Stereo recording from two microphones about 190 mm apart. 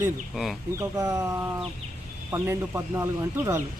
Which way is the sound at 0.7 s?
15° right (ahead or behind).